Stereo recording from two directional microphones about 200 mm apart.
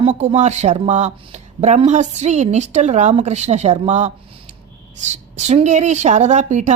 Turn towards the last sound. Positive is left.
turn(degrees=-35)  # may be behind; listen again after turning